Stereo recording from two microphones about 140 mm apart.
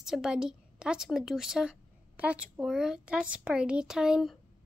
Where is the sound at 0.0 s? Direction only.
5° right (ahead or behind).